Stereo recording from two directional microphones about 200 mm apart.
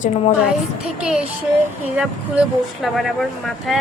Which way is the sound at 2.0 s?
Centre (ahead or behind).